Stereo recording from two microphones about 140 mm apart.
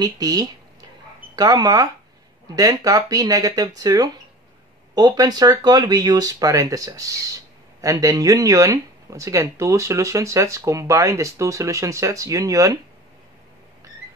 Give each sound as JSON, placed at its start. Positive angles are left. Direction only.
{"t": 0.0, "sound": "speech", "side_deg": -25}